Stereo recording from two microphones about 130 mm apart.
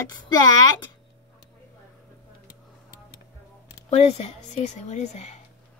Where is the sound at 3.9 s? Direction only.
55° left (ahead or behind).